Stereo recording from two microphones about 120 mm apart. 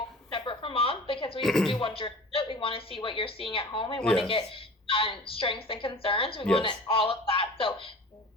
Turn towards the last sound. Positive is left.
turn(degrees=50)  # may be behind; listen again after turning